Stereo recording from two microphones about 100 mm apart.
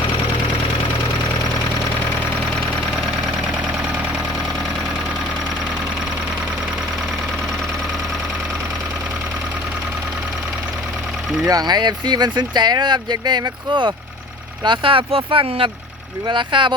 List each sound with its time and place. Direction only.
11.4 s speech: 40° right (ahead or behind); by 15.7 s 65° right (ahead or behind)
16.2 s speech: 55° right (ahead or behind)